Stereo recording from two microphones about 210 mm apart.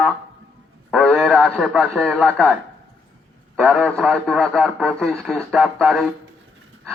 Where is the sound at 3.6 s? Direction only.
Centre (ahead or behind).